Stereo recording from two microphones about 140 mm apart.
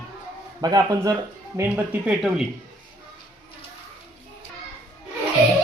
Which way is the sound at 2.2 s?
5° right (ahead or behind).